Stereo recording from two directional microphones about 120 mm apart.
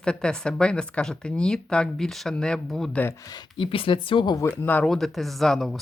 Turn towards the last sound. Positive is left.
turn(degrees=0)  # may be behind; listen again after turning